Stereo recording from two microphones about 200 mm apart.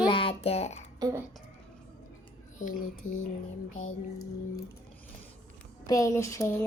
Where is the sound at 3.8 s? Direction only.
90° left.